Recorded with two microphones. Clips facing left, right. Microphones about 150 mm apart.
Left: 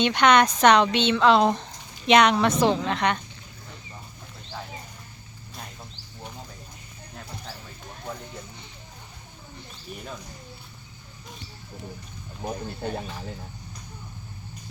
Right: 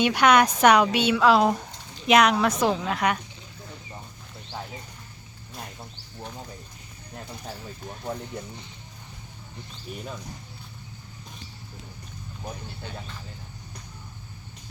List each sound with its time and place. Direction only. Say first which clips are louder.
0.0 s a woman's voice: even; 5° right (ahead or behind)
12.8 s speech: left 10 dB; 50° left (ahead or behind)